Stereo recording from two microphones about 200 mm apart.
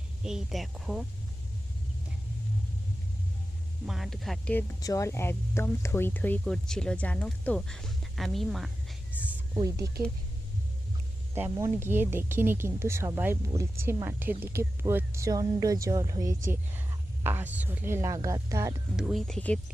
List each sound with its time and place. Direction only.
0.3 s speech: centre (ahead or behind)
3.8 s speech: centre (ahead or behind)
4.8 s speech: 15° left (ahead or behind); by 9.3 s 5° right (ahead or behind)
9.6 s speech: 15° right (ahead or behind)
11.3 s speech: 10° right (ahead or behind)
18.9 s speech: centre (ahead or behind)